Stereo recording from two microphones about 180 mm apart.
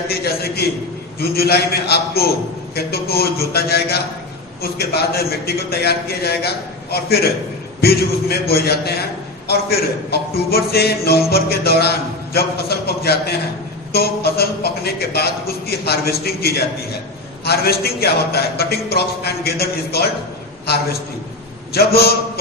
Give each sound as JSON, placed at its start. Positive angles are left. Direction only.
{"t": 0.1, "sound": "a man's voice", "side_deg": 60}
{"t": 21.7, "sound": "a man's voice", "side_deg": 60}